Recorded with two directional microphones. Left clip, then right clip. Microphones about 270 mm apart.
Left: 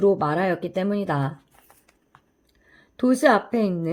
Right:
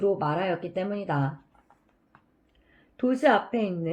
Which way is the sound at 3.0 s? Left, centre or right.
Left.